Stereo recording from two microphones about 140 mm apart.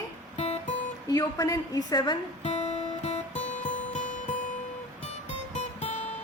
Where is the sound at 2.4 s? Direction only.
50° left (ahead or behind).